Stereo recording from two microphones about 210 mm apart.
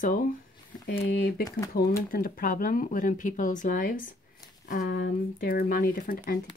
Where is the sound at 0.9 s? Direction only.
50° left (ahead or behind).